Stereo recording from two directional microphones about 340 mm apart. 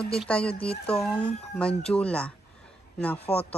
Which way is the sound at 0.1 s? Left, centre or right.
Centre.